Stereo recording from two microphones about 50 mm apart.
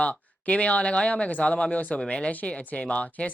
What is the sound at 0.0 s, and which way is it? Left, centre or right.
Speech, left.